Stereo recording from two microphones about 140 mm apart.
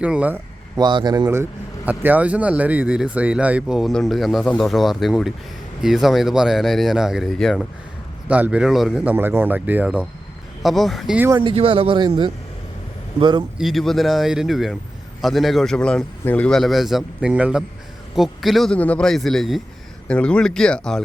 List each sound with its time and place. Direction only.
0.0 s speech: 10° right (ahead or behind)
0.8 s speech: 35° right (ahead or behind)
1.3 s a man's voice: 15° right (ahead or behind); by 7.7 s 5° left (ahead or behind)
8.3 s a man's voice: 10° right (ahead or behind)
9.1 s a man's voice: 15° right (ahead or behind)
11.3 s speech: 40° right (ahead or behind)
13.6 s a man's voice: centre (ahead or behind)